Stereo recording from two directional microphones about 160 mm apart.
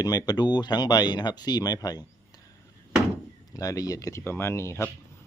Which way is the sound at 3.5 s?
20° left (ahead or behind).